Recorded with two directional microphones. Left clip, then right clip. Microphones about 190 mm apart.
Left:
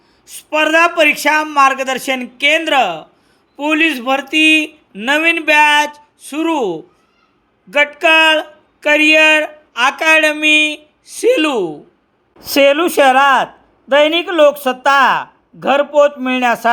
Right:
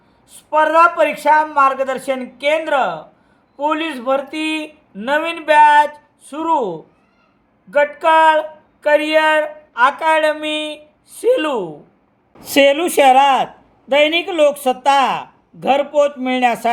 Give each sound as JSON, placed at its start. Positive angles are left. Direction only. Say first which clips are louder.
{"t": 0.3, "sound": "speech", "louder": "left 1 dB", "side_deg": 25}
{"t": 12.4, "sound": "a man's voice", "louder": "left 2 dB", "side_deg": 10}